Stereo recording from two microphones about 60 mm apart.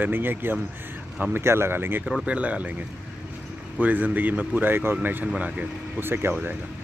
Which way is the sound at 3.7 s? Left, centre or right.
Right.